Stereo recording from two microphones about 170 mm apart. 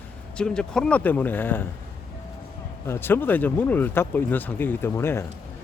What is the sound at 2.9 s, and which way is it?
Speech, 10° left (ahead or behind).